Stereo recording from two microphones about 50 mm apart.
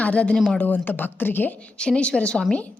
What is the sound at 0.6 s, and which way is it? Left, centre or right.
A woman's voice, left.